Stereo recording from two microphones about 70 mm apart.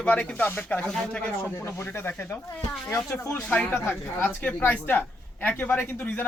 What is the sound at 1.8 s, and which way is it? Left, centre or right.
Speech, left.